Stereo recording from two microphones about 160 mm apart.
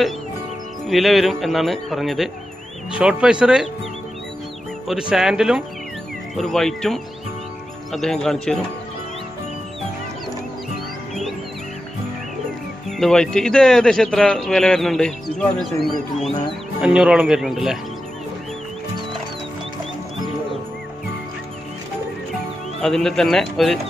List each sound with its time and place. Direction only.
0.8 s speech: centre (ahead or behind)
5.1 s speech: 5° right (ahead or behind)
12.9 s speech: 5° left (ahead or behind)
22.8 s speech: 5° left (ahead or behind)